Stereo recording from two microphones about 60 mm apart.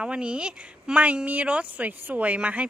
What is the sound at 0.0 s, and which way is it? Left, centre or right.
Speech, centre.